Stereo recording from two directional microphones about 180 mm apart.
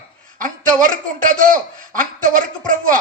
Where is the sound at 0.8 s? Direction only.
50° right (ahead or behind).